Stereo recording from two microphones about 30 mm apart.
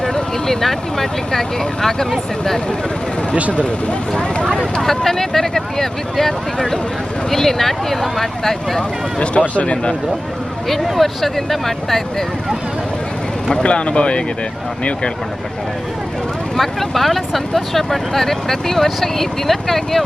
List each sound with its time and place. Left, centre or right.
0.0 s speech: centre
4.2 s speech: left
4.8 s speech: centre
9.1 s speech: left
11.0 s speech: centre
13.5 s speech: left
16.6 s speech: centre